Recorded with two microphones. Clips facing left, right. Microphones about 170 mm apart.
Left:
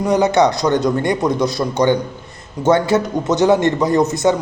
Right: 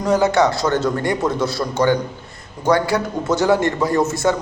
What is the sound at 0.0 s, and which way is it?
Speech, 20° left (ahead or behind).